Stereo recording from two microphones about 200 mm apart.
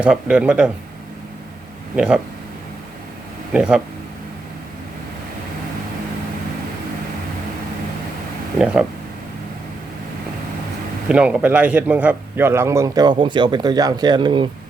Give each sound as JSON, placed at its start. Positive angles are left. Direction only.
{"t": 0.0, "sound": "speech", "side_deg": -5}
{"t": 2.0, "sound": "speech", "side_deg": -5}
{"t": 3.5, "sound": "speech", "side_deg": -5}
{"t": 8.5, "sound": "speech", "side_deg": -5}
{"t": 11.1, "sound": "a man's voice", "side_deg": -5}